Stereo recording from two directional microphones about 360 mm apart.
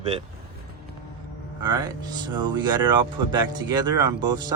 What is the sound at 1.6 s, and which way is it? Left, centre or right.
Speech, centre.